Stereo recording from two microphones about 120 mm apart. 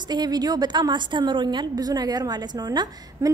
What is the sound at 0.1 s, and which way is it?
A woman's voice, 35° right (ahead or behind).